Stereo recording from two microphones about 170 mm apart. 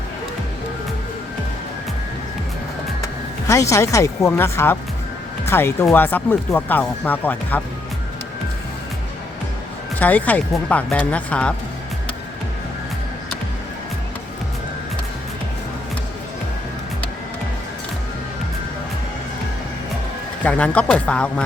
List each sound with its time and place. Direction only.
3.4 s speech: 20° left (ahead or behind)
10.0 s speech: 10° left (ahead or behind)
20.4 s speech: 10° left (ahead or behind)